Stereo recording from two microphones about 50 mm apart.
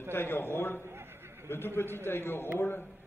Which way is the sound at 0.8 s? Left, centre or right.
Right.